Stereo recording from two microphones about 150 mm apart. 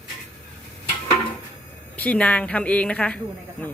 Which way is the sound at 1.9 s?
10° left (ahead or behind).